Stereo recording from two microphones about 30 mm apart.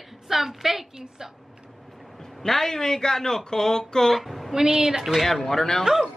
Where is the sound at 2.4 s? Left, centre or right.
Centre.